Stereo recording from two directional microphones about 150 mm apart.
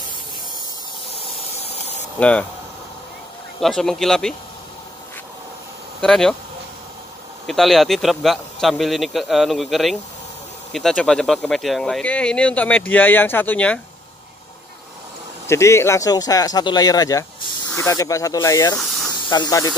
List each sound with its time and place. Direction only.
1.1 s spray: 40° left (ahead or behind)
2.1 s speech: 10° left (ahead or behind)
3.6 s a man's voice: centre (ahead or behind)
5.9 s speech: 5° left (ahead or behind)
7.4 s a man's voice: centre (ahead or behind)
15.4 s speech: 20° left (ahead or behind)